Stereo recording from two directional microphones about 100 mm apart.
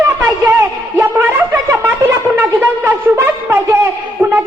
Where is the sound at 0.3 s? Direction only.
25° right (ahead or behind).